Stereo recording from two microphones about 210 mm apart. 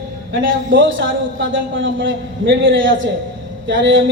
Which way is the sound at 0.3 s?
60° right (ahead or behind).